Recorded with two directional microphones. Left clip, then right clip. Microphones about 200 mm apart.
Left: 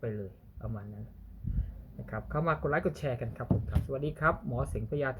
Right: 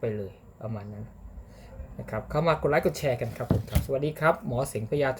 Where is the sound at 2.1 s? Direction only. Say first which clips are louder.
Right 6 dB; 10° right (ahead or behind).